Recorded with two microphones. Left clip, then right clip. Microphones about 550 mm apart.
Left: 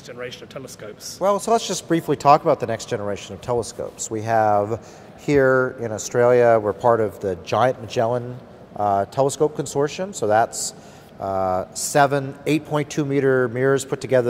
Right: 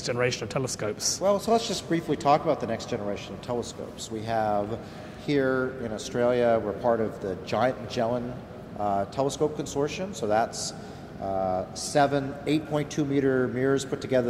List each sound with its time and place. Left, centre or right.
0.0 s speech: right
1.2 s a man's voice: left